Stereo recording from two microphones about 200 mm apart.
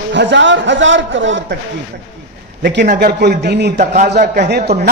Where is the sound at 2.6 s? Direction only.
55° right (ahead or behind).